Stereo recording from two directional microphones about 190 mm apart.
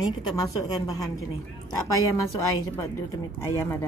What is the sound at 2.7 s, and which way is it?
Speech, 15° left (ahead or behind).